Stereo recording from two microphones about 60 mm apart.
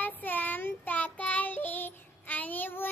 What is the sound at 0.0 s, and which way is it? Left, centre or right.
Child singing, left.